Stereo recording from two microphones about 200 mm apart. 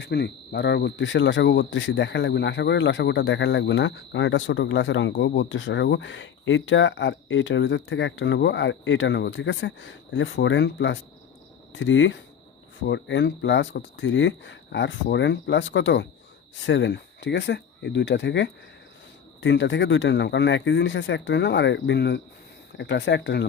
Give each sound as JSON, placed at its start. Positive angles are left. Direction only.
{"t": 0.0, "sound": "speech", "side_deg": 55}